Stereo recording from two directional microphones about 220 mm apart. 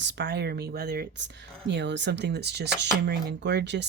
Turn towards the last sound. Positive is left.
turn(degrees=-50)  # may be behind; listen again after turning